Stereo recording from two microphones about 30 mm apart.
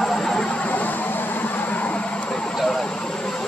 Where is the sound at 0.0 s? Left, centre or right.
Left.